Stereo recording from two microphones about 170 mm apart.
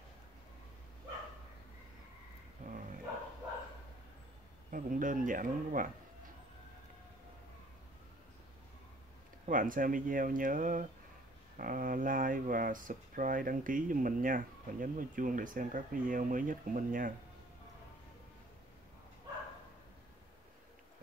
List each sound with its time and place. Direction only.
2.6 s dog: 50° right (ahead or behind)
4.6 s speech: 55° right (ahead or behind)
9.5 s speech: 50° right (ahead or behind)